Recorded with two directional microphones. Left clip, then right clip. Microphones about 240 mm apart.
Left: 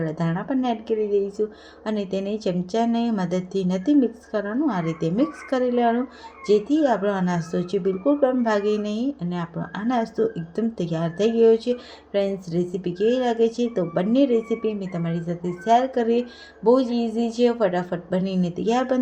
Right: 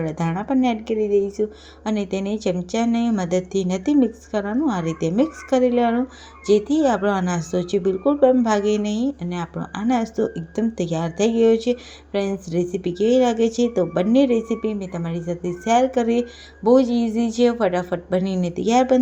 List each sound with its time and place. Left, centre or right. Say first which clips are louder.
0.0 s a woman's voice: right 2 dB; centre